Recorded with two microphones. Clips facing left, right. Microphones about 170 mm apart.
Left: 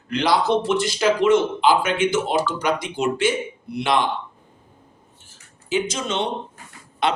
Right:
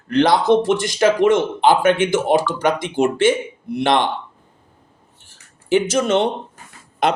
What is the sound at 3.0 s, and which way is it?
Speech, 55° right (ahead or behind).